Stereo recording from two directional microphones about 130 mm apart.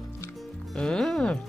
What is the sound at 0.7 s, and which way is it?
Speech, 5° left (ahead or behind).